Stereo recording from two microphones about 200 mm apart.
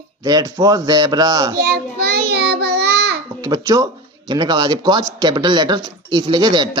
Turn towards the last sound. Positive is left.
turn(degrees=-20)  # may be behind; listen again after turning